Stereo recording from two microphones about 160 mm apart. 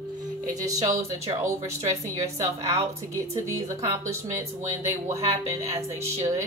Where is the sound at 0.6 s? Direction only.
20° right (ahead or behind).